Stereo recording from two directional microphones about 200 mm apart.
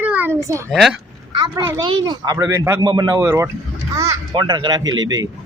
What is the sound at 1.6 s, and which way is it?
Speech, 15° right (ahead or behind).